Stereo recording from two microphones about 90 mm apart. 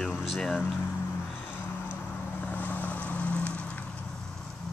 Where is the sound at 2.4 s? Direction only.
20° left (ahead or behind).